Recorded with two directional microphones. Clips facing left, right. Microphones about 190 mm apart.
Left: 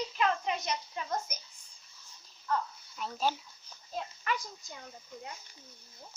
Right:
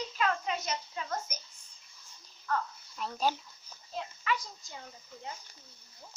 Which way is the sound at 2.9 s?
Centre (ahead or behind).